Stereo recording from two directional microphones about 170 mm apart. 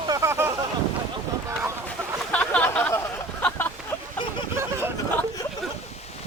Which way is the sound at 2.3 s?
10° left (ahead or behind).